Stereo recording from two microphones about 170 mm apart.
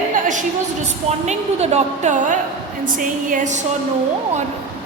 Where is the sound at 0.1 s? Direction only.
50° right (ahead or behind).